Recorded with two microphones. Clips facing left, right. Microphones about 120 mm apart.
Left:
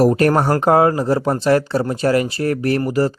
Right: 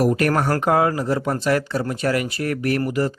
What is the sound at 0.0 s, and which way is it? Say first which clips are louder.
Speech: left 5 dB; 30° left (ahead or behind).